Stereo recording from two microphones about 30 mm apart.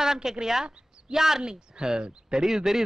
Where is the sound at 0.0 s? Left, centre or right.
Centre.